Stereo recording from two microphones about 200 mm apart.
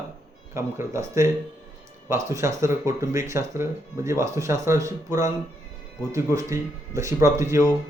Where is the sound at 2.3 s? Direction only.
15° right (ahead or behind).